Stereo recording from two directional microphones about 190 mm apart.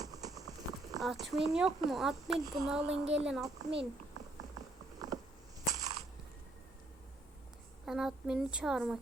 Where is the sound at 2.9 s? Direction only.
70° right (ahead or behind).